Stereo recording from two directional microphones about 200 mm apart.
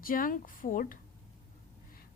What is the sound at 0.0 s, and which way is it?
Speech, 45° left (ahead or behind).